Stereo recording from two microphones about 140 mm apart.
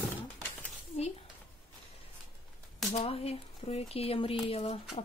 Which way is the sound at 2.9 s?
45° left (ahead or behind).